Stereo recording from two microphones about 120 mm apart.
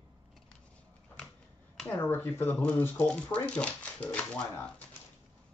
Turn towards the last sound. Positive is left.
turn(degrees=10)  # may be behind; listen again after turning